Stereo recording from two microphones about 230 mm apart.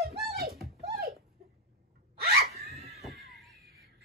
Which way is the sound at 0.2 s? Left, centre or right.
Right.